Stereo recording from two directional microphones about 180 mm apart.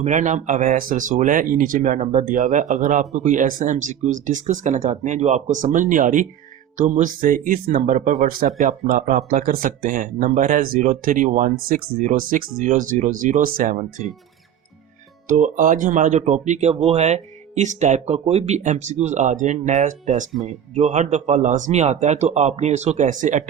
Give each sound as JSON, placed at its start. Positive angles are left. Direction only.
{"t": 0.0, "sound": "speech", "side_deg": -40}
{"t": 15.3, "sound": "speech", "side_deg": -45}